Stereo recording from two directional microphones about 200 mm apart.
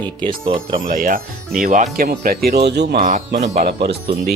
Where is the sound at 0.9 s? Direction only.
45° right (ahead or behind).